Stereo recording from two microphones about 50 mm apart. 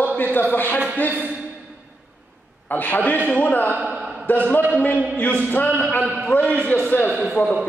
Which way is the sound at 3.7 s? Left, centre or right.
Right.